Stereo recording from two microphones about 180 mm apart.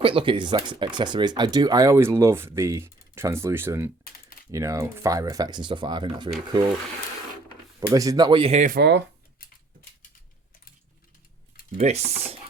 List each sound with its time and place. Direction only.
0.0 s speech: 30° right (ahead or behind)
7.9 s speech: 20° right (ahead or behind); by 8.7 s 35° right (ahead or behind)
8.7 s speech: 70° right (ahead or behind)
11.8 s speech: 40° right (ahead or behind)